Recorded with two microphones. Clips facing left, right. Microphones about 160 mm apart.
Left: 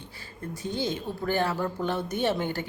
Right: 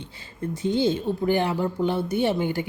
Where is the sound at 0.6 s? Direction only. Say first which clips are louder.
Right 8 dB; 25° right (ahead or behind).